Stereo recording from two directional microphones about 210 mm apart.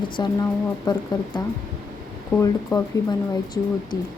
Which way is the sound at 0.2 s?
20° left (ahead or behind).